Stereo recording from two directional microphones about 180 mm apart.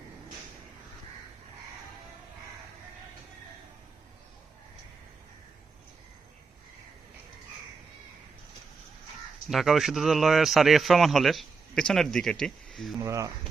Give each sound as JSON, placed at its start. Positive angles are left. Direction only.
{"t": 9.5, "sound": "speech", "side_deg": 0}
{"t": 13.0, "sound": "speech", "side_deg": -15}